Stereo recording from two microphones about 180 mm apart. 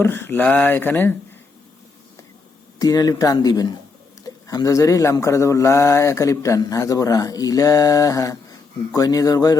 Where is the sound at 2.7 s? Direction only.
20° left (ahead or behind).